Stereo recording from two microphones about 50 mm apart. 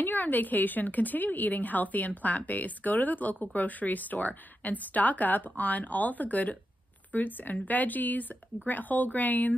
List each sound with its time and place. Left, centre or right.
0.0 s a woman's voice: left